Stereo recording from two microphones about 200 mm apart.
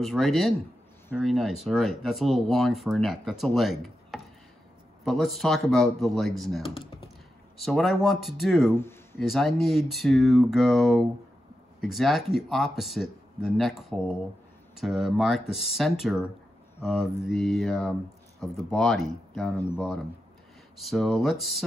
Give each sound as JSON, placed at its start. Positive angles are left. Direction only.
{"t": 0.0, "sound": "speech", "side_deg": 0}
{"t": 8.7, "sound": "a sound", "side_deg": 10}
{"t": 9.2, "sound": "speech", "side_deg": 0}
{"t": 20.7, "sound": "speech", "side_deg": 0}